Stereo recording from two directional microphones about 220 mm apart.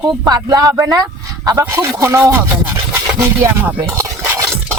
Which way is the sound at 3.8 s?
15° right (ahead or behind).